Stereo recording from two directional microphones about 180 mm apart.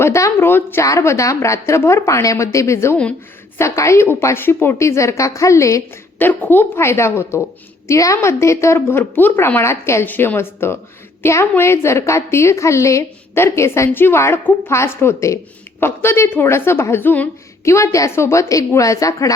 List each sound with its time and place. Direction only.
0.0 s a woman's voice: 15° left (ahead or behind)